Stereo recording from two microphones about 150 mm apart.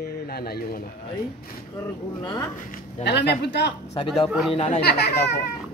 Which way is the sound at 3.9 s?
35° left (ahead or behind).